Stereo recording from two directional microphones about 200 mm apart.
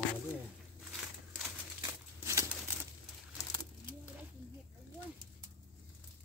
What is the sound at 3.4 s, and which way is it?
Bird, 20° left (ahead or behind).